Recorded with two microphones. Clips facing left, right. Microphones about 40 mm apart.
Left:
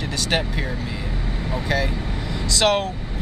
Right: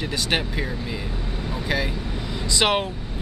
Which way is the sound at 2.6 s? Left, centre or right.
Right.